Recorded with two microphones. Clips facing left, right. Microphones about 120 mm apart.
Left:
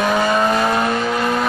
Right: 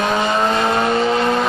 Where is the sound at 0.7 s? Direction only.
25° right (ahead or behind).